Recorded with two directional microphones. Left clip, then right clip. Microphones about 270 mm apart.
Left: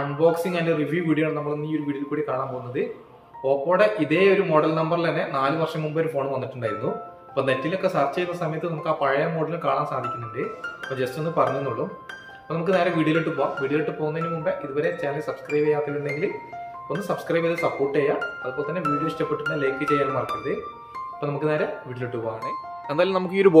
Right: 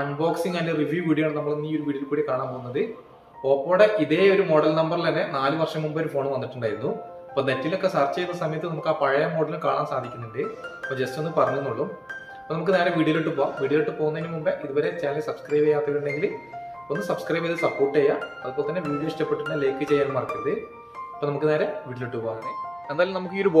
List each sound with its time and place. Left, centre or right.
0.2 s speech: centre
12.4 s speech: centre
22.8 s speech: left